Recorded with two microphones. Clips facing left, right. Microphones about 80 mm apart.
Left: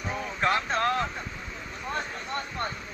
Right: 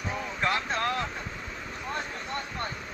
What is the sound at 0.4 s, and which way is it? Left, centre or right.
Speech, left.